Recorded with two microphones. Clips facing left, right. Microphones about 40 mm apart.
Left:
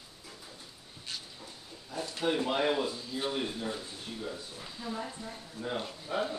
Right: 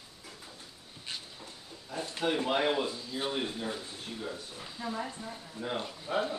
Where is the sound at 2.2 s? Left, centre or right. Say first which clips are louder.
Even; centre.